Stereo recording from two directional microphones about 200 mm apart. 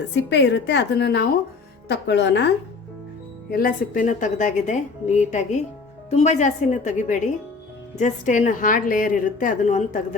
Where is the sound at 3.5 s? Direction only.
45° left (ahead or behind).